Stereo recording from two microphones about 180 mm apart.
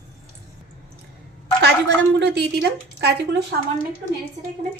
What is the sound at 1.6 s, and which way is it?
A woman's voice, 70° right (ahead or behind).